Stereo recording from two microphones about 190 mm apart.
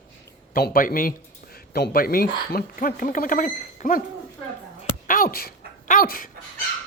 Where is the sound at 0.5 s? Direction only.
50° left (ahead or behind).